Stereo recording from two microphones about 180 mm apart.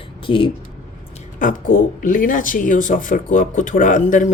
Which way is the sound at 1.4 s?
50° left (ahead or behind).